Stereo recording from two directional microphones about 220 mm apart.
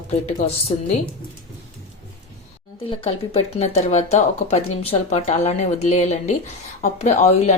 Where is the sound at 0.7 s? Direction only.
20° left (ahead or behind).